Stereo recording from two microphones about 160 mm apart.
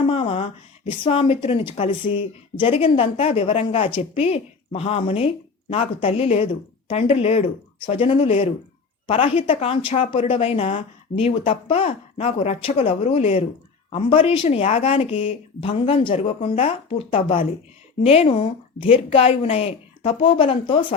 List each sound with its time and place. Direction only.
0.1 s a woman's voice: 35° left (ahead or behind)